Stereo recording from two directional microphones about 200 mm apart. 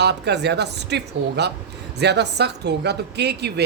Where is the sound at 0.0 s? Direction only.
55° right (ahead or behind).